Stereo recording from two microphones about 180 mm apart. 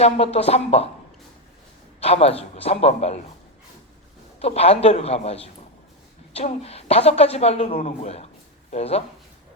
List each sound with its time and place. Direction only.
0.0 s a man's voice: 35° left (ahead or behind)
2.0 s a man's voice: 35° left (ahead or behind)
4.4 s a man's voice: 35° left (ahead or behind)